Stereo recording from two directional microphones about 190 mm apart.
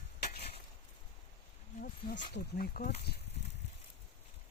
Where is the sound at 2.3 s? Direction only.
55° left (ahead or behind).